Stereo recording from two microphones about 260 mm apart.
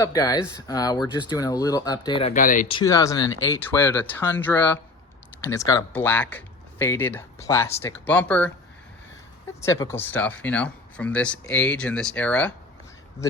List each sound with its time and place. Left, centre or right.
0.0 s speech: centre
2.3 s speech: left
2.6 s speech: centre
9.6 s speech: centre